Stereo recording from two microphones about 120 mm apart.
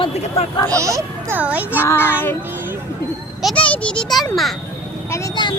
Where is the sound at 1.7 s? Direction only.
20° left (ahead or behind).